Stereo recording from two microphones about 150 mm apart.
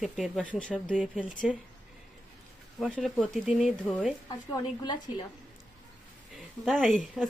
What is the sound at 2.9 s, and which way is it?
Speech, 5° left (ahead or behind).